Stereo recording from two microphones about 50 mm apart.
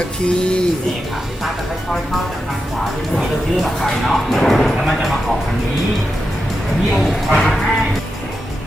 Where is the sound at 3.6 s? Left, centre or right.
Centre.